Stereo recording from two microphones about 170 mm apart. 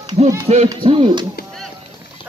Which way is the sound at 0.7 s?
30° right (ahead or behind).